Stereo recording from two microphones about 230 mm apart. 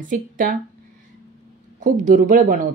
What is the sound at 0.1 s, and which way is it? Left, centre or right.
Speech, right.